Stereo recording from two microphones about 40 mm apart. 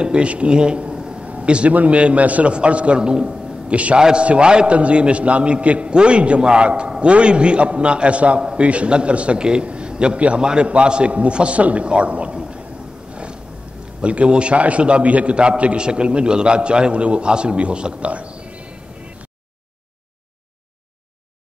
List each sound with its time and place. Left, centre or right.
0.0 s a sound: right
1.7 s a man's voice: right
13.1 s roaring cats: right
14.0 s a man's voice: right